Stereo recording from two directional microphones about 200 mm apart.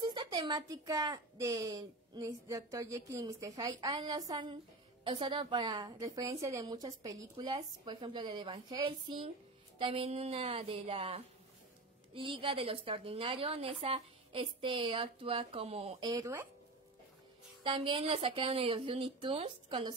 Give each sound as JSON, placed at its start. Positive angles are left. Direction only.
{"t": 0.0, "sound": "speech", "side_deg": -20}
{"t": 16.1, "sound": "speech", "side_deg": -15}
{"t": 17.6, "sound": "speech", "side_deg": -25}